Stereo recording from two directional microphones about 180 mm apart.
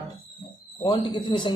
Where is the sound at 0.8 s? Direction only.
25° left (ahead or behind).